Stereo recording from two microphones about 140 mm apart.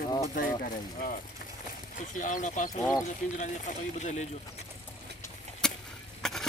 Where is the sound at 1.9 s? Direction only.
65° left (ahead or behind).